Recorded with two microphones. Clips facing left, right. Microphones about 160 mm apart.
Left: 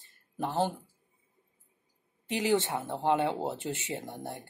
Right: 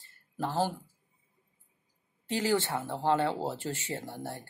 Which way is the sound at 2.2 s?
20° left (ahead or behind).